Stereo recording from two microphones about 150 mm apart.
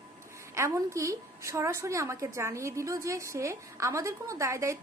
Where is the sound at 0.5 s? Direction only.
20° right (ahead or behind).